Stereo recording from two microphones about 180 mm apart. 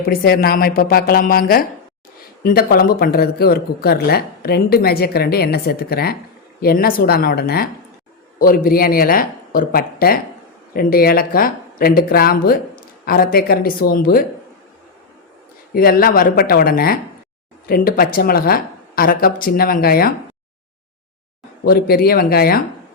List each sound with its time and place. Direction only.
0.0 s speech: 55° left (ahead or behind)
15.7 s speech: 55° left (ahead or behind)
21.6 s speech: 55° left (ahead or behind)